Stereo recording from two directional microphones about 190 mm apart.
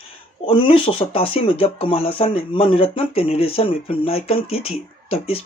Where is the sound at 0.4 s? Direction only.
30° left (ahead or behind).